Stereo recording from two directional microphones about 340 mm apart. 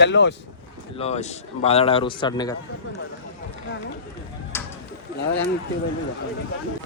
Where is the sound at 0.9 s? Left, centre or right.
Centre.